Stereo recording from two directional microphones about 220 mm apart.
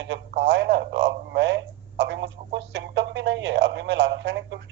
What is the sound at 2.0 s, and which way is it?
Music, 50° right (ahead or behind).